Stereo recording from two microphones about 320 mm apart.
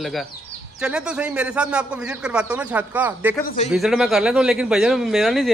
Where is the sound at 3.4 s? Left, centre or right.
Left.